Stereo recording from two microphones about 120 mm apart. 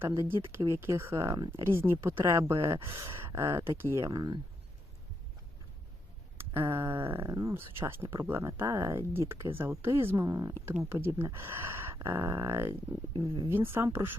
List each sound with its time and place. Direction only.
0.0 s speech: 20° right (ahead or behind)
4.1 s speech: 35° right (ahead or behind)
6.3 s a sound: 20° right (ahead or behind)
7.0 s speech: 45° right (ahead or behind)
7.3 s speech: 25° right (ahead or behind)
10.2 s speech: 30° right (ahead or behind)
10.8 s speech: 20° right (ahead or behind)
13.1 s speech: 40° right (ahead or behind)
13.7 s speech: 20° right (ahead or behind)